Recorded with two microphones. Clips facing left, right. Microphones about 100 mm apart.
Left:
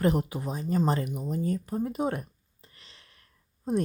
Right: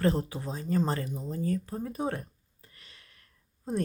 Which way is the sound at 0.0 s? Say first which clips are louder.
Left 2 dB; 15° left (ahead or behind).